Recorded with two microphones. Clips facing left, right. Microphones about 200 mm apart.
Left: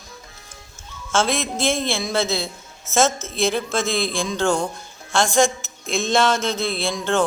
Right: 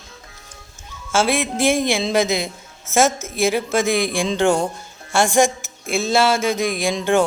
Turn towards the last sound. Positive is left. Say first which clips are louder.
# right 4 dB
turn(degrees=-15)  # may be behind; listen again after turning